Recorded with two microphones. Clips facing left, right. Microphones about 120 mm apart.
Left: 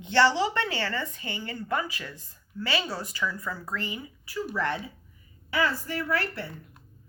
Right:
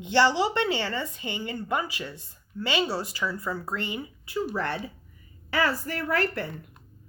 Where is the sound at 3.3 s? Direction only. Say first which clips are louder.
Right 3 dB; 30° right (ahead or behind).